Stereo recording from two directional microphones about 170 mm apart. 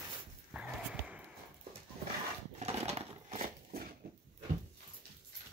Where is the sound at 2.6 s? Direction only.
40° right (ahead or behind).